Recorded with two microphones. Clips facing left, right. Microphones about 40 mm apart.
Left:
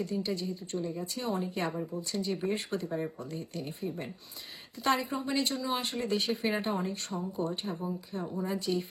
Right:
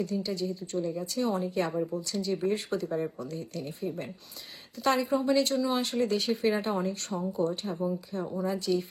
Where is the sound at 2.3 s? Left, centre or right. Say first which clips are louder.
Right 5 dB; centre.